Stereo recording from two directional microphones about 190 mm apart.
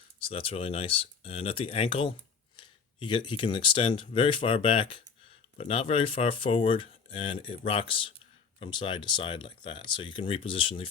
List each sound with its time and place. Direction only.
0.2 s speech: 30° left (ahead or behind)